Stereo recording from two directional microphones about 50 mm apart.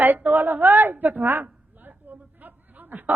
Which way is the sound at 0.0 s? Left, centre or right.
Right.